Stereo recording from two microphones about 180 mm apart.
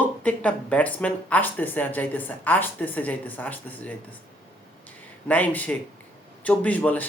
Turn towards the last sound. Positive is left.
turn(degrees=10)  # may be behind; listen again after turning